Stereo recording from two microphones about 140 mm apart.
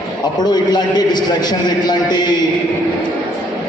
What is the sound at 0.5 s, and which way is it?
A man's voice, 30° left (ahead or behind).